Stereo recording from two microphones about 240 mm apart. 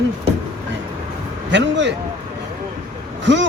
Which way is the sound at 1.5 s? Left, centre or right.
Right.